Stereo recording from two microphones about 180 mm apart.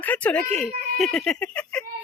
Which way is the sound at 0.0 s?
10° left (ahead or behind).